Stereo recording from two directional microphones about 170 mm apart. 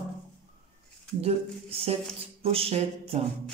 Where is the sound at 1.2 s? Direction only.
35° right (ahead or behind).